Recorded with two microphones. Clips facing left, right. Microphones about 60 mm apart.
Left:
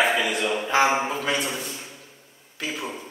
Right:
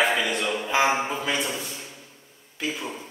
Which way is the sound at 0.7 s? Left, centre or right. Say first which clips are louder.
Left 1 dB; left.